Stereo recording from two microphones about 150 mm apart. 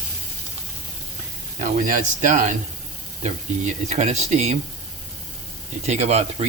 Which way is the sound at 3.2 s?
50° right (ahead or behind).